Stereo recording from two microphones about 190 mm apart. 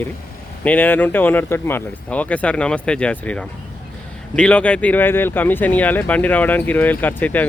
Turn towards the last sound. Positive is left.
turn(degrees=10)  # may be behind; listen again after turning